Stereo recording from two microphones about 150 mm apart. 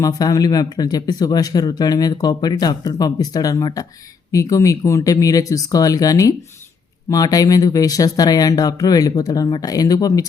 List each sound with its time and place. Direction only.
0.0 s speech: 25° left (ahead or behind)